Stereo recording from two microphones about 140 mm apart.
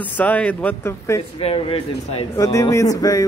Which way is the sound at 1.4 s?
45° left (ahead or behind).